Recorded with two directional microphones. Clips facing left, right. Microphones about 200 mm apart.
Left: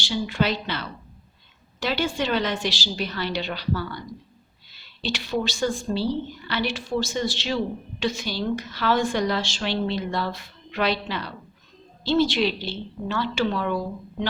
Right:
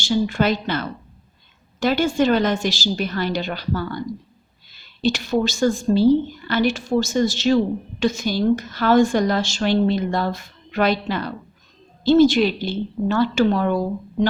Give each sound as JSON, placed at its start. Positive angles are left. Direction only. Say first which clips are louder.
{"t": 0.0, "sound": "a woman's voice", "louder": "right 5 dB", "side_deg": -45}